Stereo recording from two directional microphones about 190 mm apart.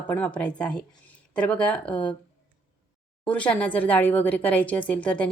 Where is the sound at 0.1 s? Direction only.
10° left (ahead or behind).